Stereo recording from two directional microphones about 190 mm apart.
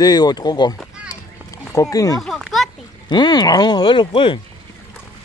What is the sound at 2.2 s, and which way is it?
Children playing, centre (ahead or behind).